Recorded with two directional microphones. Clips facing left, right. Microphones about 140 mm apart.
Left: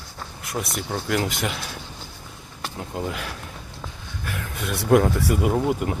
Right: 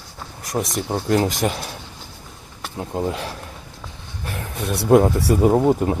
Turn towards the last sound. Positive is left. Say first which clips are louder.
# right 6 dB
turn(degrees=-30)  # may be behind; listen again after turning